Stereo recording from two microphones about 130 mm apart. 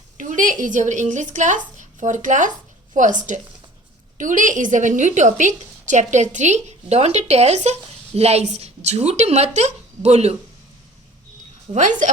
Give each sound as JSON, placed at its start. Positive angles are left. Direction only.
{"t": 0.2, "sound": "speech", "side_deg": -80}
{"t": 11.7, "sound": "speech", "side_deg": -75}